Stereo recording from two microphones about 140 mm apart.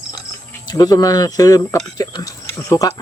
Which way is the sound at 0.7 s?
30° left (ahead or behind).